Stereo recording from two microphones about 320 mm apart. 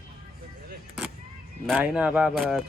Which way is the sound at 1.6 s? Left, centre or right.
Centre.